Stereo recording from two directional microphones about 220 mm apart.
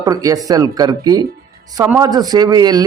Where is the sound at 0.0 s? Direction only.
15° right (ahead or behind).